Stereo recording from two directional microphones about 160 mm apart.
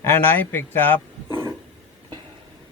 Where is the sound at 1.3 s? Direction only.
15° right (ahead or behind).